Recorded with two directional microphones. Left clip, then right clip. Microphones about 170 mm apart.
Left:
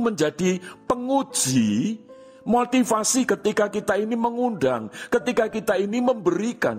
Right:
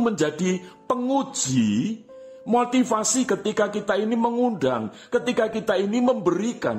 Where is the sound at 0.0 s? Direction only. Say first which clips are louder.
Left 1 dB; 40° left (ahead or behind).